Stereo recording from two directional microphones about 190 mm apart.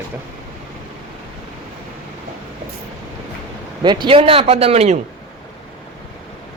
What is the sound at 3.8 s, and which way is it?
A man's voice, 25° right (ahead or behind).